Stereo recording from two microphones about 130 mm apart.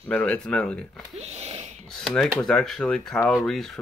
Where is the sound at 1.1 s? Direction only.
55° right (ahead or behind).